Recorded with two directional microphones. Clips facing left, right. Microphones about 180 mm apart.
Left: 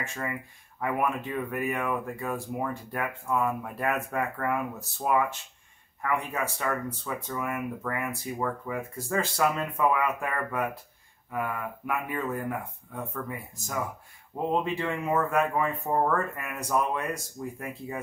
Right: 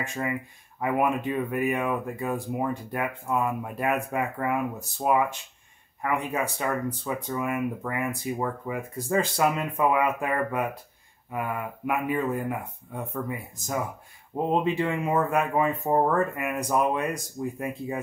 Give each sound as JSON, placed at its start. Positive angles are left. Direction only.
{"t": 0.0, "sound": "speech", "side_deg": -15}
{"t": 14.3, "sound": "speech", "side_deg": -20}